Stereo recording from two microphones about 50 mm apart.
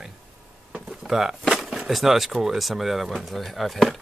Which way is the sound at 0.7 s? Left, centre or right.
Centre.